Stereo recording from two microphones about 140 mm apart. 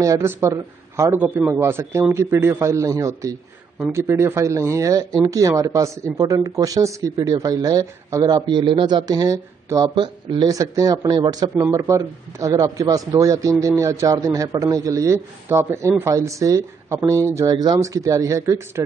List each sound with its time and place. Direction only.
0.0 s speech: 20° right (ahead or behind)